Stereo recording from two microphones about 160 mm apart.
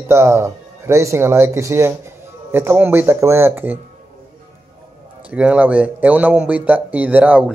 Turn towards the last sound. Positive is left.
turn(degrees=-10)  # may be behind; listen again after turning